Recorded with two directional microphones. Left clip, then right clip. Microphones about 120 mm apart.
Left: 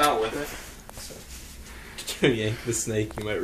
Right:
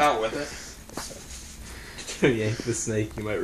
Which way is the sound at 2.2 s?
35° right (ahead or behind).